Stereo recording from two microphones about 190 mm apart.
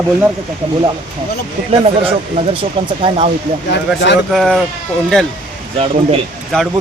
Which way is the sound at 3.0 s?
35° right (ahead or behind).